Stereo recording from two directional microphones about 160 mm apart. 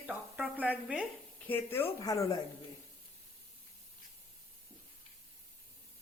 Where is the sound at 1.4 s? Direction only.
10° left (ahead or behind).